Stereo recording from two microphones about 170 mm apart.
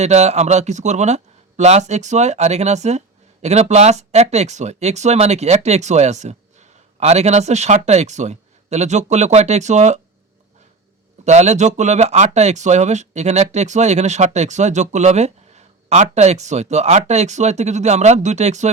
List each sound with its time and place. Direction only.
0.0 s speech: 40° right (ahead or behind)
11.3 s speech: 40° right (ahead or behind)